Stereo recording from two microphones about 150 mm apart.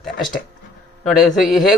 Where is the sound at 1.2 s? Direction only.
60° left (ahead or behind).